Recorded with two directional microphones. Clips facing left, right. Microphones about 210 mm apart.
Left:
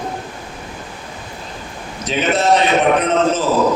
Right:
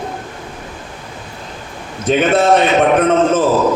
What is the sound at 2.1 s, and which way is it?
A man's voice, 50° right (ahead or behind).